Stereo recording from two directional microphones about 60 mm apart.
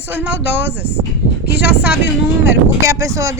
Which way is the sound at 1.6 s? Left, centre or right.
Right.